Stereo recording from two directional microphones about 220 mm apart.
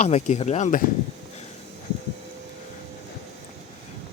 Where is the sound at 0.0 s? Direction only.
30° left (ahead or behind).